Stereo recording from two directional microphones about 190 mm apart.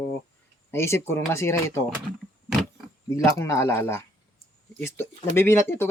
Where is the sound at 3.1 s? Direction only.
15° left (ahead or behind).